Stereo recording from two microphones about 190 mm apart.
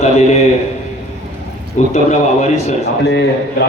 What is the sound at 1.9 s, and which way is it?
Speech, 40° left (ahead or behind).